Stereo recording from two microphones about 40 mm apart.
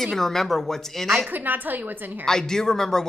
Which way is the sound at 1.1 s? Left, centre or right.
Right.